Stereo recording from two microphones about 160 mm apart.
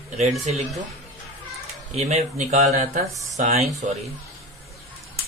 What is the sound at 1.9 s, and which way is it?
Speech, 40° right (ahead or behind).